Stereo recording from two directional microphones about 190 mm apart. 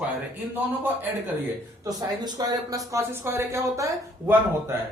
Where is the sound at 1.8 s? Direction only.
20° right (ahead or behind).